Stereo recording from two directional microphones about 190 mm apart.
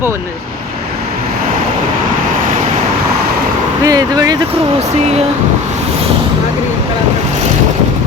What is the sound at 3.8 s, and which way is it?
Speech, 20° right (ahead or behind).